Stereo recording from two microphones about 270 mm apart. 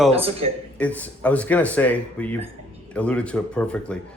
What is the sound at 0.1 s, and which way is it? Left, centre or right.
Speech, right.